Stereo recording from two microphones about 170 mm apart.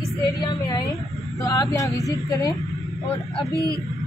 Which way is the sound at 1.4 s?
20° left (ahead or behind).